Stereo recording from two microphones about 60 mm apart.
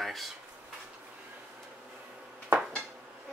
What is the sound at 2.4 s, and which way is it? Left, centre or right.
Dishes, right.